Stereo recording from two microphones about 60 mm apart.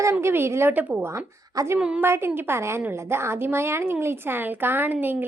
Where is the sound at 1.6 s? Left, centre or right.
Right.